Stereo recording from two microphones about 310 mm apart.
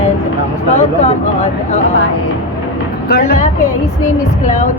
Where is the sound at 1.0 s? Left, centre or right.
Centre.